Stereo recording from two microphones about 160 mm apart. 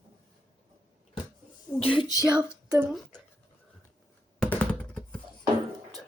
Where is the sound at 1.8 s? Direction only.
30° left (ahead or behind).